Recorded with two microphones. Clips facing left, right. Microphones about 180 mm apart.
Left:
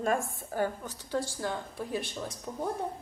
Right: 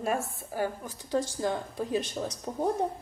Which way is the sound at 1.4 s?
20° right (ahead or behind).